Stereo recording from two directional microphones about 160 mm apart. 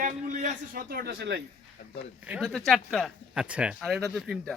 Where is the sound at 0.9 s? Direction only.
80° right.